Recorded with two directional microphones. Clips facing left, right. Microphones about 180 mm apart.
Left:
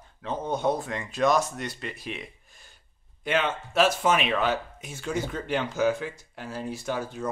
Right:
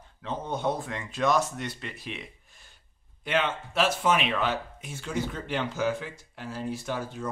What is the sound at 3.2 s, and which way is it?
Speech, 45° left (ahead or behind).